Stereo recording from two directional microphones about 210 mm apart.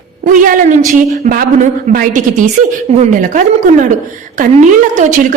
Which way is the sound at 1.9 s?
40° right (ahead or behind).